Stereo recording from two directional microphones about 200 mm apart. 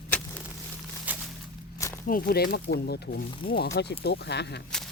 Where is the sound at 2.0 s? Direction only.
45° left (ahead or behind).